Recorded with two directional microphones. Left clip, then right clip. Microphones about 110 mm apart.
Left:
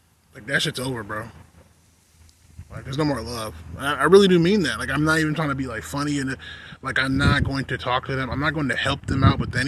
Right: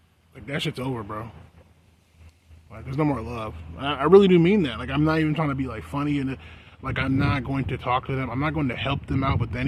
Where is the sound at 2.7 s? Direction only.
20° right (ahead or behind).